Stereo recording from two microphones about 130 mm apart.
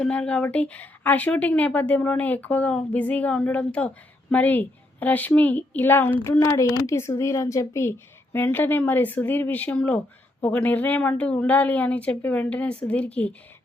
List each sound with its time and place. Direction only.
0.0 s speech: 10° left (ahead or behind)